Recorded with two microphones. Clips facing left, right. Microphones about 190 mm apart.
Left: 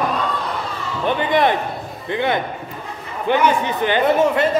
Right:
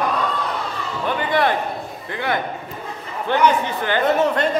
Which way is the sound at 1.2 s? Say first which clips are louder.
Left 2 dB; 20° left (ahead or behind).